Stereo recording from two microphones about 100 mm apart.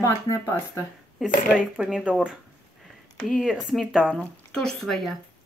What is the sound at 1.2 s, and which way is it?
Speech, 5° right (ahead or behind).